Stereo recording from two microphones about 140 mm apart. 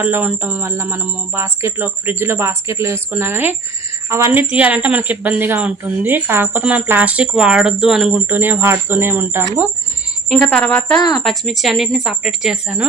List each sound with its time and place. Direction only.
0.0 s a woman's voice: 10° right (ahead or behind)
8.3 s a woman's voice: 15° right (ahead or behind)
10.4 s a woman's voice: 5° left (ahead or behind)